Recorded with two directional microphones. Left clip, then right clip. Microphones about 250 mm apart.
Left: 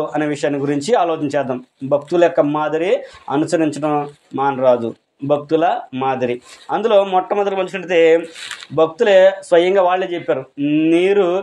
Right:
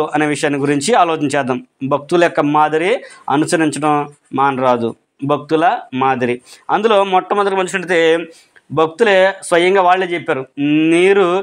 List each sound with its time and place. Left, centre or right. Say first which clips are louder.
0.0 s speech: right 3 dB; right